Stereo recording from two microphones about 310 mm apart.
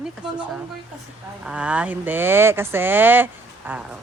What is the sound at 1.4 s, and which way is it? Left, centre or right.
Speech, centre.